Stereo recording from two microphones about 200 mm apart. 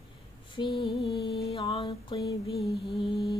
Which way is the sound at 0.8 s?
Centre (ahead or behind).